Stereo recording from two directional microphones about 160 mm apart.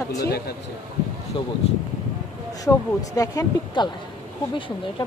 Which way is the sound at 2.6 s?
20° left (ahead or behind).